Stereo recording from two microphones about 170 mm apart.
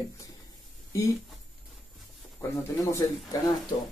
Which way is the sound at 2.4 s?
15° left (ahead or behind).